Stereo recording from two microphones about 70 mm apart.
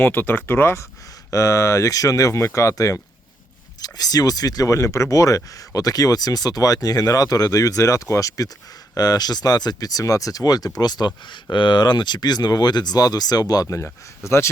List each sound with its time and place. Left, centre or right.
0.0 s speech: left
1.3 s speech: left
3.8 s speech: left
9.0 s speech: left
11.7 s speech: left
13.8 s speech: left